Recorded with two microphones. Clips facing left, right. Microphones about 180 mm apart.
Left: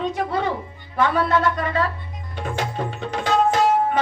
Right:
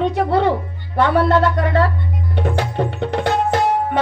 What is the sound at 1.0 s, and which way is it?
Speech, 60° right (ahead or behind).